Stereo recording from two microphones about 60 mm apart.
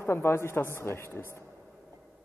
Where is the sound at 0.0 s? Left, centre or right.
Left.